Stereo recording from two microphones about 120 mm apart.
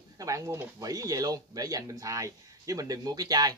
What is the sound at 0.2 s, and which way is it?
Speech, 25° right (ahead or behind).